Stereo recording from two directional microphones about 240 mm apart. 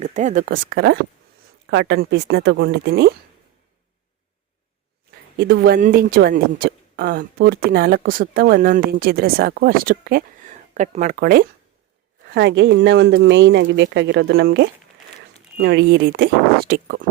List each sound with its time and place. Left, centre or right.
0.0 s a woman's voice: right
5.4 s a woman's voice: right